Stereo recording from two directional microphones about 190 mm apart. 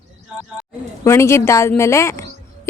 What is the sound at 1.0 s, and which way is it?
Speech, 15° left (ahead or behind).